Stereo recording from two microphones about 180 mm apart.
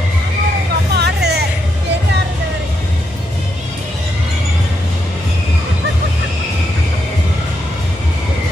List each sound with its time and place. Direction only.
0.9 s music: 65° right (ahead or behind)